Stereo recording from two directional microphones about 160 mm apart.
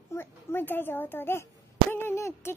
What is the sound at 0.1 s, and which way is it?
A woman's voice, 15° left (ahead or behind).